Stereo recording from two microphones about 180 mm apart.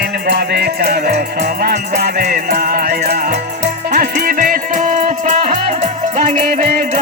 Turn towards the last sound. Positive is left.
turn(degrees=-45)  # may be behind; listen again after turning